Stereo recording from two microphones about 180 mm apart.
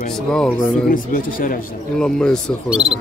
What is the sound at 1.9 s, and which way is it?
Speech, 5° left (ahead or behind).